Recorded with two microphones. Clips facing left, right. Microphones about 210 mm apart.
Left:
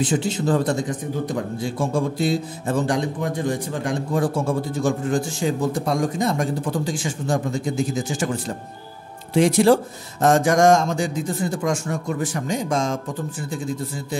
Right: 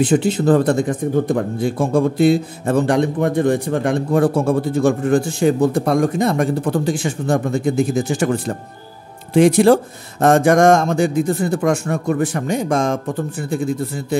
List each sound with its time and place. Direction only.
0.0 s speech: 60° right (ahead or behind)